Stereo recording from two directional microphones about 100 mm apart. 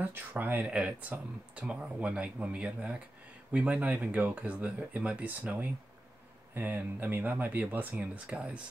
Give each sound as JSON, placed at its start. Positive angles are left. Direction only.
{"t": 0.0, "sound": "speech", "side_deg": -20}